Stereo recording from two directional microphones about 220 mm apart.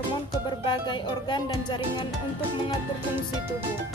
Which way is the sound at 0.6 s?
20° left (ahead or behind).